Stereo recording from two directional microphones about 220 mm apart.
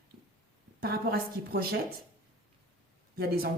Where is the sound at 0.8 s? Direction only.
45° right (ahead or behind).